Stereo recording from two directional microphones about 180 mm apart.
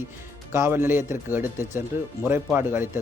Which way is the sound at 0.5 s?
15° right (ahead or behind).